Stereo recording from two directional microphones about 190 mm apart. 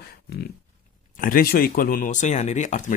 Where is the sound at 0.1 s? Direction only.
55° left (ahead or behind).